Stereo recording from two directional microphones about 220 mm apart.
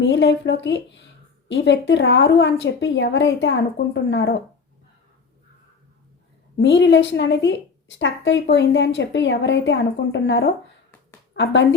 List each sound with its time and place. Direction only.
0.0 s a woman's voice: 55° left (ahead or behind)
6.6 s a woman's voice: 55° left (ahead or behind)